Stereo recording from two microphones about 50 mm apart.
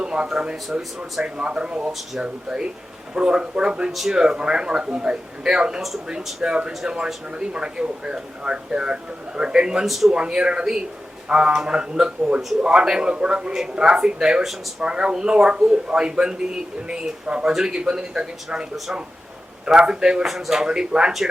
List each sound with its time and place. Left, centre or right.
0.0 s a sound: centre
0.8 s speech: centre
1.2 s a man's voice: centre
3.9 s speech: centre
4.2 s speech: centre
9.8 s speech: centre
10.1 s a man's voice: centre